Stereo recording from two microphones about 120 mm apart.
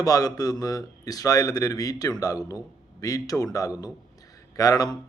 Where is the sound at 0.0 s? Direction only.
30° left (ahead or behind).